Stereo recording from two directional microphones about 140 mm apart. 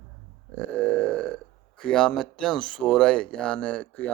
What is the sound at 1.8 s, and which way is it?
Speech, 5° left (ahead or behind).